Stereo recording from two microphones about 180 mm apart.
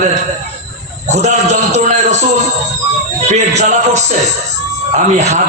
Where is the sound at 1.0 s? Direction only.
40° right (ahead or behind).